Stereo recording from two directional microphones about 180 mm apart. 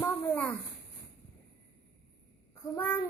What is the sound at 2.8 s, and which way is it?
Speech, 10° left (ahead or behind).